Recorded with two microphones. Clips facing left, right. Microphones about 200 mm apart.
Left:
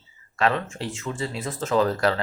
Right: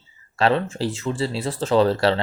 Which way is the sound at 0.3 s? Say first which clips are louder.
Right 4 dB; 35° right (ahead or behind).